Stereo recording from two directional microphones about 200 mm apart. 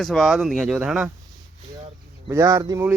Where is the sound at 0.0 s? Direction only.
Centre (ahead or behind).